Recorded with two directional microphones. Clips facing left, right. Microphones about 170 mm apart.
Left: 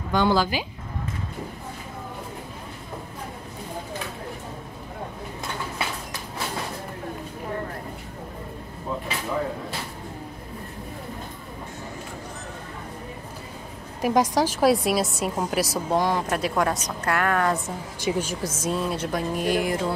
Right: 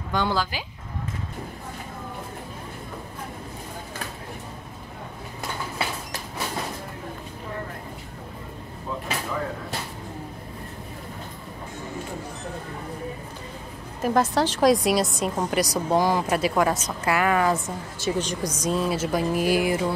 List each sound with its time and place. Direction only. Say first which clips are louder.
0.1 s a woman's voice: left 4 dB; 10° left (ahead or behind)
14.0 s a woman's voice: left 1 dB; 10° left (ahead or behind); by 17.7 s 5° right (ahead or behind)
18.0 s a woman's voice: even; 10° left (ahead or behind)